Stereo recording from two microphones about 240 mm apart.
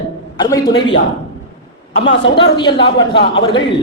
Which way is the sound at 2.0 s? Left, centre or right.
Left.